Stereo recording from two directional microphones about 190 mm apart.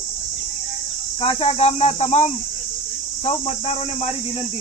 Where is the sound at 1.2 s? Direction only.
30° left (ahead or behind).